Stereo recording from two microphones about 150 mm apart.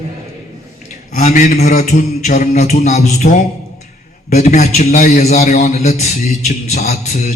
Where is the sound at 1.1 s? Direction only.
50° left (ahead or behind); by 1.7 s 80° left.